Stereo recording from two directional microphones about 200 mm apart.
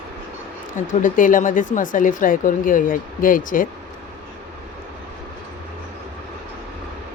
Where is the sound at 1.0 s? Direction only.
40° left (ahead or behind).